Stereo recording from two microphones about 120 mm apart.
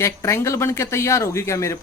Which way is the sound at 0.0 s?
25° left (ahead or behind).